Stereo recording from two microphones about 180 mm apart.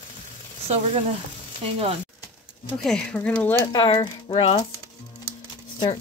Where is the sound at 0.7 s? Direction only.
35° right (ahead or behind).